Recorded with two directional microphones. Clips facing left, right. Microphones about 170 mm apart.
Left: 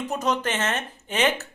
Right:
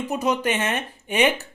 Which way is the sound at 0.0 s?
10° right (ahead or behind).